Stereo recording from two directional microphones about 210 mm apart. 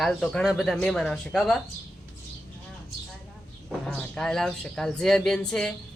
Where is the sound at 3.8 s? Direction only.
5° left (ahead or behind).